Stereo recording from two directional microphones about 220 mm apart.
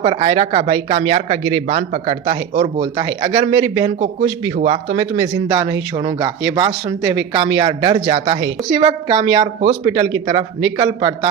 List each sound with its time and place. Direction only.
0.0 s speech: 25° right (ahead or behind)